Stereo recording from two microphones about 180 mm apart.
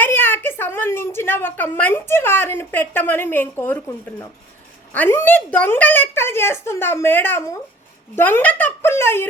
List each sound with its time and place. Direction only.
0.0 s a woman's voice: 10° left (ahead or behind)
4.9 s a woman's voice: 10° left (ahead or behind)